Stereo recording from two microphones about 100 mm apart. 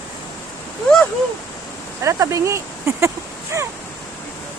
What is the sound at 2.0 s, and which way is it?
Speech, 35° right (ahead or behind).